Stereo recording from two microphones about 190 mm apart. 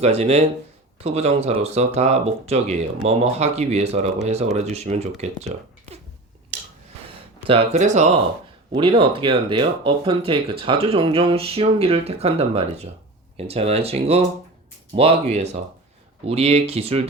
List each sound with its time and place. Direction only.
0.0 s speech: 35° right (ahead or behind)
7.4 s speech: 30° right (ahead or behind)
8.7 s speech: 25° right (ahead or behind)